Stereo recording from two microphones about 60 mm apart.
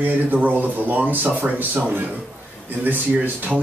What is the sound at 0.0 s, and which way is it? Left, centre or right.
Speech, right.